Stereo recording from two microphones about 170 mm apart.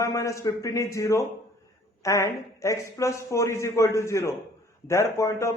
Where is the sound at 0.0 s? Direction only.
20° left (ahead or behind).